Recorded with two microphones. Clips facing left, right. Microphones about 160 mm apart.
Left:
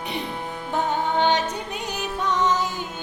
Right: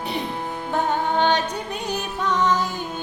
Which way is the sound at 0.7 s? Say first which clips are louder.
Right 1 dB; 15° left (ahead or behind).